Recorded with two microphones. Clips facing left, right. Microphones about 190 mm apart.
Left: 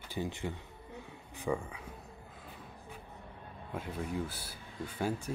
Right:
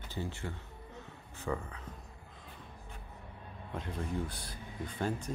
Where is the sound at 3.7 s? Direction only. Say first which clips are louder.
Even; 5° left (ahead or behind).